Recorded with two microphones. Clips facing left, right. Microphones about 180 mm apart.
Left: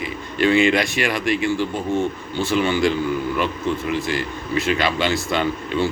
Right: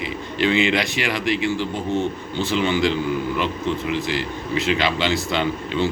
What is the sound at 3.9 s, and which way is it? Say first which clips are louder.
A man's voice: left 1 dB; 50° left (ahead or behind).